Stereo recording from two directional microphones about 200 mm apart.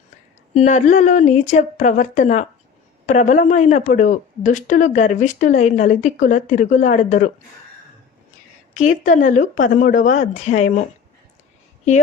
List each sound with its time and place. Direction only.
0.5 s speech: 35° left (ahead or behind)
8.7 s speech: 40° left (ahead or behind)